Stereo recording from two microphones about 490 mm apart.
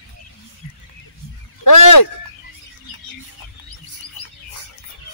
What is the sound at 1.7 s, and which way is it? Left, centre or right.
Fowl, left.